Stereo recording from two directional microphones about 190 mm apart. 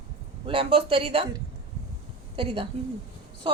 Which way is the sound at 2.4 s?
25° right (ahead or behind).